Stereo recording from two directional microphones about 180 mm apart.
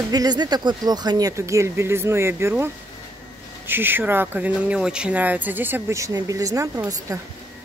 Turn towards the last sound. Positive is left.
turn(degrees=-20)  # may be behind; listen again after turning